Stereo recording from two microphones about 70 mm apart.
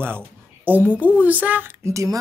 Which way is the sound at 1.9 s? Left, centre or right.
Right.